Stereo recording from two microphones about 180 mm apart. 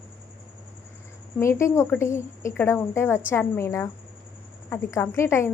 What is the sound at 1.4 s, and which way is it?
Speech, 15° left (ahead or behind).